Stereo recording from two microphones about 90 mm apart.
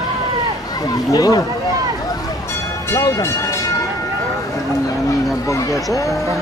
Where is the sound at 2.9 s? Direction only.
35° left (ahead or behind).